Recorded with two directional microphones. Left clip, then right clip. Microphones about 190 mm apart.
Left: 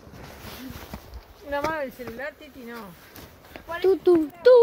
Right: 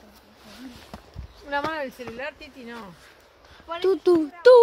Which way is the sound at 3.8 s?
20° right (ahead or behind).